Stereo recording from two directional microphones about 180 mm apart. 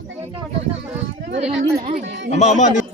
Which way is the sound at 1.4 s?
35° right (ahead or behind).